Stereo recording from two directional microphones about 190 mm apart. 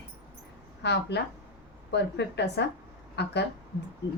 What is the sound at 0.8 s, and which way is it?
A woman's voice, 65° left (ahead or behind).